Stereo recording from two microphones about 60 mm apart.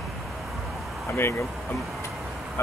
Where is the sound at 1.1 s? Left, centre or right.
Left.